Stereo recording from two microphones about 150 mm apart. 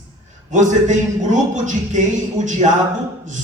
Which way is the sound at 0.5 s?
55° right (ahead or behind).